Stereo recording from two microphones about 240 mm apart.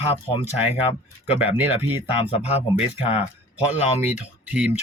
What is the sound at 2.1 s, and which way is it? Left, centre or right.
Speech, left.